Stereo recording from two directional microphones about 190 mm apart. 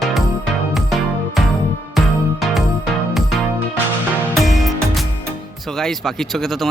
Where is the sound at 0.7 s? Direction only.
Centre (ahead or behind).